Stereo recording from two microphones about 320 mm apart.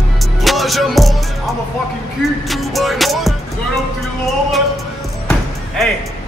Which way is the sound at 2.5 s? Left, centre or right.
Centre.